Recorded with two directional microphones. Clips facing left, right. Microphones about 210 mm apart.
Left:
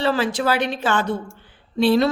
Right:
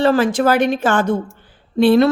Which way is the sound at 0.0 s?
50° right (ahead or behind).